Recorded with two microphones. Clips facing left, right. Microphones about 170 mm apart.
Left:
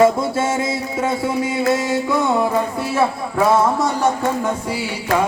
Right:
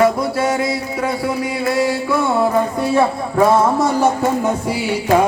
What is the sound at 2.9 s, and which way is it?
Music, centre (ahead or behind).